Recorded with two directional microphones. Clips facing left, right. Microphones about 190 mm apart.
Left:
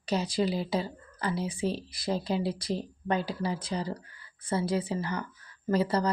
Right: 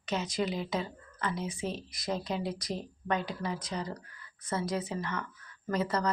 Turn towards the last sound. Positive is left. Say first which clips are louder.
# left 4 dB
turn(degrees=30)  # may be behind; listen again after turning